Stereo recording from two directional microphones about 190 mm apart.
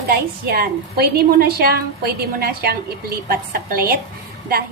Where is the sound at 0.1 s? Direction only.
55° right (ahead or behind).